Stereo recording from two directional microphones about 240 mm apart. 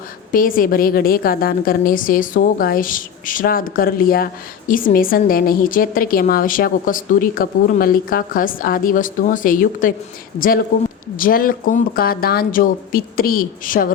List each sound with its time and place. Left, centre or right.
0.3 s a woman's voice: left